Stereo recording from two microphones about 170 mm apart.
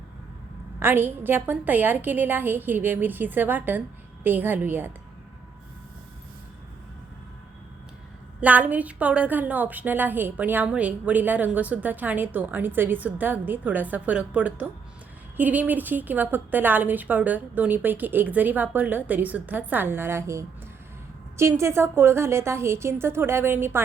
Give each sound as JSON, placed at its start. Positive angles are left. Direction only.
{"t": 0.8, "sound": "a woman's voice", "side_deg": -10}
{"t": 8.4, "sound": "a woman's voice", "side_deg": -10}